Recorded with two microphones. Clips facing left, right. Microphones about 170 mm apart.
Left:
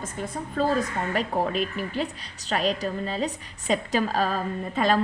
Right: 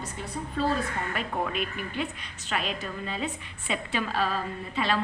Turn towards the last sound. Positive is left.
turn(degrees=45)  # may be behind; listen again after turning